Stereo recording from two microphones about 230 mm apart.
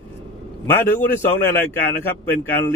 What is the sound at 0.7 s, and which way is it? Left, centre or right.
A man's voice, centre.